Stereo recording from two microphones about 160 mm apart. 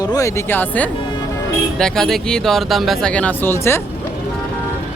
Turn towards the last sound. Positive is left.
turn(degrees=15)  # may be behind; listen again after turning